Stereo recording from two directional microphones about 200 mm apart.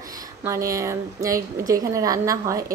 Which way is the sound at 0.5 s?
15° right (ahead or behind).